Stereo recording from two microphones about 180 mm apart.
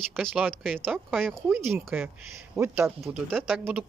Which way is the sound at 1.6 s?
15° right (ahead or behind).